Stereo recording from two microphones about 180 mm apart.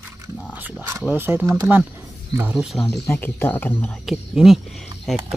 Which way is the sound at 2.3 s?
10° right (ahead or behind).